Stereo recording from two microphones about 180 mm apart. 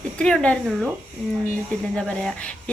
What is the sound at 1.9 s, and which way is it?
Speech, 5° left (ahead or behind).